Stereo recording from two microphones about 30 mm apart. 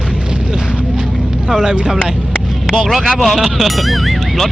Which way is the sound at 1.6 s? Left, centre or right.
Right.